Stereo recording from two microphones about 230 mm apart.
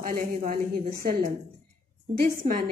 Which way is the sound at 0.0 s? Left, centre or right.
Right.